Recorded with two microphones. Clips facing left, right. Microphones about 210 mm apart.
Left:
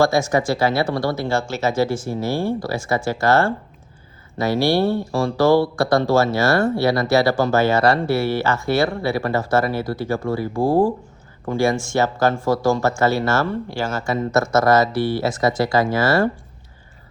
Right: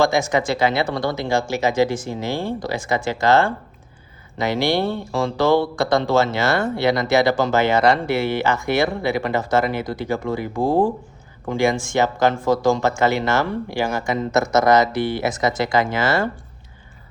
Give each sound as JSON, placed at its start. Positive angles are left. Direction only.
{"t": 0.0, "sound": "speech", "side_deg": -20}